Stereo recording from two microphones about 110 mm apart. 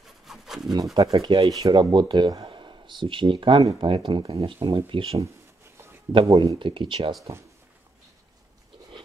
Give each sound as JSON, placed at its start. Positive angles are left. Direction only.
{"t": 0.2, "sound": "rub", "side_deg": -5}
{"t": 0.9, "sound": "sanding", "side_deg": -35}
{"t": 1.3, "sound": "speech", "side_deg": -40}
{"t": 6.3, "sound": "speech", "side_deg": -45}